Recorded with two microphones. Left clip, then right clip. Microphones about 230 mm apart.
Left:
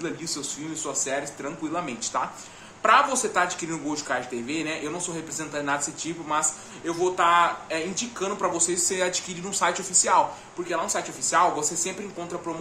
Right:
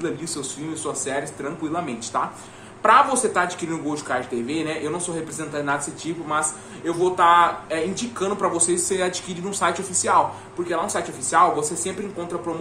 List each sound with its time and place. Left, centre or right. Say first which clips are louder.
0.0 s a man's voice: right 3 dB; centre